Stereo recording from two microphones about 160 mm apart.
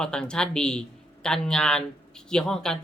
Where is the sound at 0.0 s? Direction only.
5° left (ahead or behind).